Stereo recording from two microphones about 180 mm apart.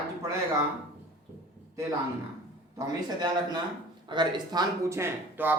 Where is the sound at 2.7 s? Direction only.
20° right (ahead or behind).